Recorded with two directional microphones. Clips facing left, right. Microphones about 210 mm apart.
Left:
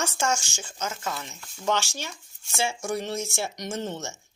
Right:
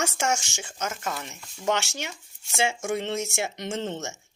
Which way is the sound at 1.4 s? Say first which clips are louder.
Right 1 dB; 10° right (ahead or behind).